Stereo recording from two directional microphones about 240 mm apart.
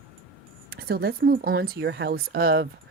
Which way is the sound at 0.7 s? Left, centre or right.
Right.